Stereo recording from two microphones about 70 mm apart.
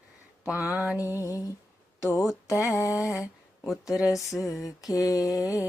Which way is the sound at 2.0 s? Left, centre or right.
Left.